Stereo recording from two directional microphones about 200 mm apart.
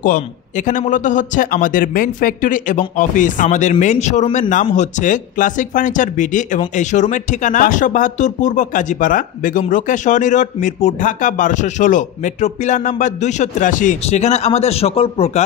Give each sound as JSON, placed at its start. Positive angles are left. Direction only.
{"t": 0.0, "sound": "speech", "side_deg": 40}